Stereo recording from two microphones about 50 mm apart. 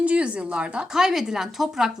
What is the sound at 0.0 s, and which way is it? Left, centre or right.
Speech, right.